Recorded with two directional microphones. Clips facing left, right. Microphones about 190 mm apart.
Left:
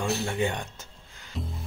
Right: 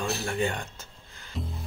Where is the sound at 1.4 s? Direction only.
Centre (ahead or behind).